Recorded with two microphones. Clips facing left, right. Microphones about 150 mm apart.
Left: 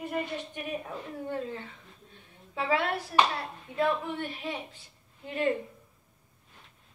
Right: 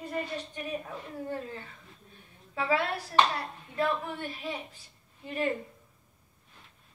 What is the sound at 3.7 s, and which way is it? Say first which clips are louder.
Speech: left 2 dB; 20° left (ahead or behind).